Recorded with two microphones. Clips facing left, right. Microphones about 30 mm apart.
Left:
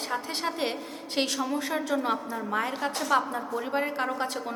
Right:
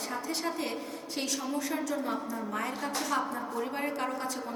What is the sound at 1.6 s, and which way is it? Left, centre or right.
Speech, left.